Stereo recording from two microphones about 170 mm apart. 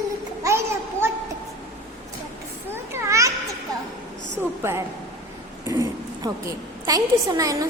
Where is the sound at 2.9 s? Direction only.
15° right (ahead or behind).